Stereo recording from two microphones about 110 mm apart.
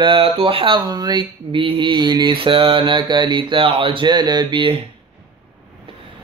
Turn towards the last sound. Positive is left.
turn(degrees=-50)  # may be behind; listen again after turning